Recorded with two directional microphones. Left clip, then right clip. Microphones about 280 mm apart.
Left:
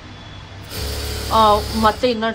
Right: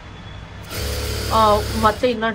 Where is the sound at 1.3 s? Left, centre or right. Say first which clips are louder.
Left 2 dB; centre.